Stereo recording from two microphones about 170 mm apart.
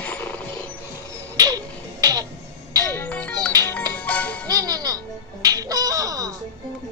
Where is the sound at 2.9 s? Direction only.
10° left (ahead or behind).